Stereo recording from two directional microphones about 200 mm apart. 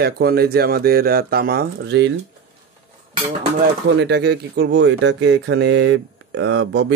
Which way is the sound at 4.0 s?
60° right (ahead or behind).